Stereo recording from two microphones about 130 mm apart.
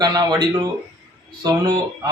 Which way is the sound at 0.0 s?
30° right (ahead or behind).